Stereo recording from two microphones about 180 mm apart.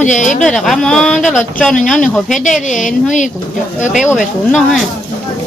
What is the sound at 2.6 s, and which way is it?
A woman's voice, 45° left (ahead or behind).